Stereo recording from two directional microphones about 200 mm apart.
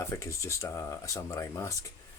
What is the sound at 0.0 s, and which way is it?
Speech, 15° left (ahead or behind).